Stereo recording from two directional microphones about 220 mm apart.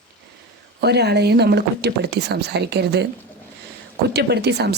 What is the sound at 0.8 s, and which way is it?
Speech, 50° right (ahead or behind).